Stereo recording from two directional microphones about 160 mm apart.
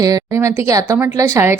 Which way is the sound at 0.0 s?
20° right (ahead or behind).